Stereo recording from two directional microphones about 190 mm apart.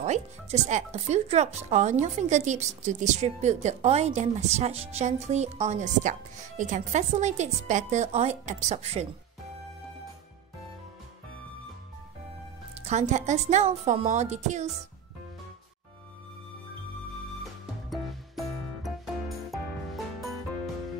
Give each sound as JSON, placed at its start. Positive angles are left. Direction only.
{"t": 0.0, "sound": "speech", "side_deg": -35}
{"t": 12.8, "sound": "speech", "side_deg": -35}
{"t": 17.8, "sound": "music", "side_deg": 0}